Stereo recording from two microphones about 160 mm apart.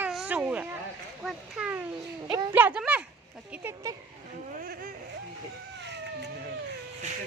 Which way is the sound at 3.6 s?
20° right (ahead or behind).